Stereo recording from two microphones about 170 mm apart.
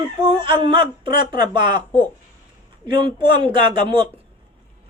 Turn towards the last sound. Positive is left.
turn(degrees=-30)  # may be behind; listen again after turning